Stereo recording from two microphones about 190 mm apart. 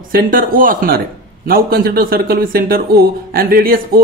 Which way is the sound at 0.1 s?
50° right (ahead or behind).